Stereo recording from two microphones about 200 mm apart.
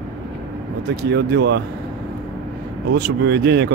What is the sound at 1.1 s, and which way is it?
Speech, 60° right (ahead or behind).